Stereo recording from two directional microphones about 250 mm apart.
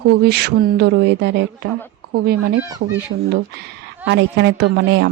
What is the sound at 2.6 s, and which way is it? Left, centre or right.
Speech, centre.